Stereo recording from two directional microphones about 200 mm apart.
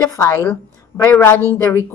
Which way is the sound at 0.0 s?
15° left (ahead or behind).